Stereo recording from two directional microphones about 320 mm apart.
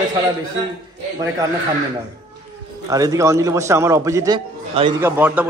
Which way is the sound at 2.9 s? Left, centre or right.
Centre.